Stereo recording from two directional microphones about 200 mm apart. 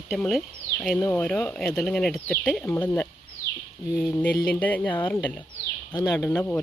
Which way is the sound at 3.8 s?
5° right (ahead or behind).